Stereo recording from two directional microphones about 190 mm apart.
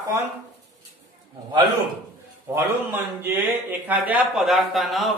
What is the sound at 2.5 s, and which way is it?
A man's voice, 10° right (ahead or behind).